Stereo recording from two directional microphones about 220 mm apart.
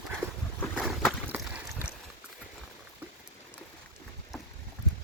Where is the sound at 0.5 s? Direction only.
Centre (ahead or behind).